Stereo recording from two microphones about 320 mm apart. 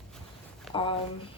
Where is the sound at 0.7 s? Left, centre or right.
Centre.